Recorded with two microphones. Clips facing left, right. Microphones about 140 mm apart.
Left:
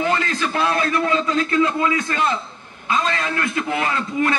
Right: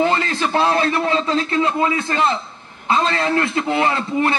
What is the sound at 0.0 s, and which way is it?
A man's voice, 30° right (ahead or behind).